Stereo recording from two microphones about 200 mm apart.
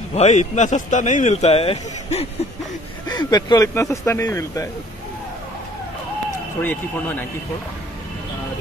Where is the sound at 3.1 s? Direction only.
20° left (ahead or behind).